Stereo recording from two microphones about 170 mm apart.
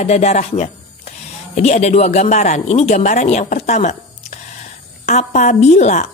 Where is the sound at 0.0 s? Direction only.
40° left (ahead or behind).